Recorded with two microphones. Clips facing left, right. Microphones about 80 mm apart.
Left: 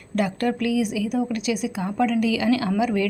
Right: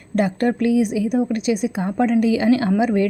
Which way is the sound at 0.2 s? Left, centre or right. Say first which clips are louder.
Right 4 dB; right.